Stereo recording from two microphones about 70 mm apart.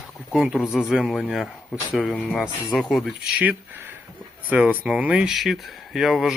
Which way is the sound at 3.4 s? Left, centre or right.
Right.